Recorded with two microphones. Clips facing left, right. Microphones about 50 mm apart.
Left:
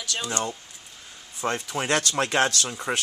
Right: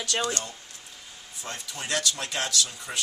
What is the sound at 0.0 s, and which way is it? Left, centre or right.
Speech, right.